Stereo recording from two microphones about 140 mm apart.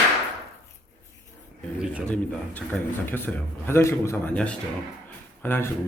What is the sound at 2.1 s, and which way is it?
A man's voice, 10° left (ahead or behind).